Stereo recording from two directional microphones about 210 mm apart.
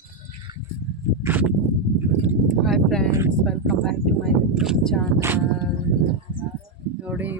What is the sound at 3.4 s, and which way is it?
Speech, centre (ahead or behind).